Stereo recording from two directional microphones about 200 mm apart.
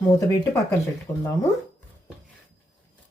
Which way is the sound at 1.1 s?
20° left (ahead or behind).